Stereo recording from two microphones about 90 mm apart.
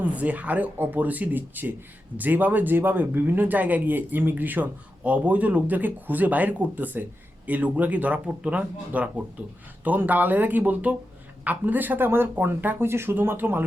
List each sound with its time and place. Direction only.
0.0 s speech: 15° right (ahead or behind)